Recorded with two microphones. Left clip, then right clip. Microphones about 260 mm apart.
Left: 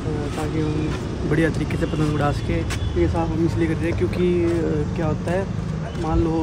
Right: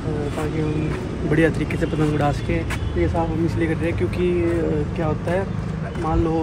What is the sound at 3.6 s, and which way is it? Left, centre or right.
Speech, centre.